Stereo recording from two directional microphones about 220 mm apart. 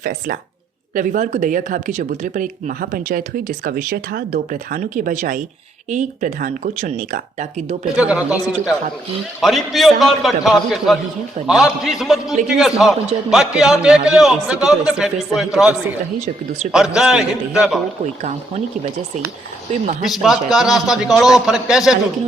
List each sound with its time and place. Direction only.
0.0 s speech: 40° right (ahead or behind)
7.9 s a man's voice: 5° right (ahead or behind)
16.7 s a man's voice: 5° right (ahead or behind)
19.8 s speech: 35° right (ahead or behind)
20.1 s a man's voice: centre (ahead or behind)